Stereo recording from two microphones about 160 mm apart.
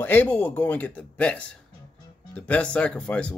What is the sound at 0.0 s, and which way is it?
Speech, 10° left (ahead or behind).